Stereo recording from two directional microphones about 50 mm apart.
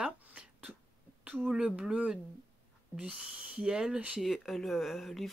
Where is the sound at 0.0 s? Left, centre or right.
Right.